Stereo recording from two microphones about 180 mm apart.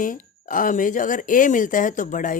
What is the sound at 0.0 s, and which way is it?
Speech, 45° left (ahead or behind).